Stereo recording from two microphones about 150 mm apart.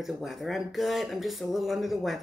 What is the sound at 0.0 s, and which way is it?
Speech, centre (ahead or behind).